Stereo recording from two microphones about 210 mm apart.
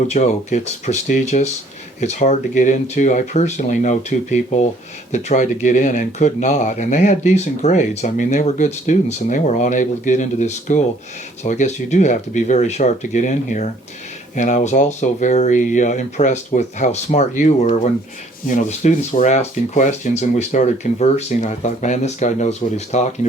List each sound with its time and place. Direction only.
0.1 s speech: 35° left (ahead or behind)